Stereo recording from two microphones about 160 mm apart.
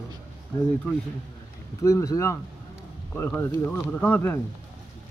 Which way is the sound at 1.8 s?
20° left (ahead or behind).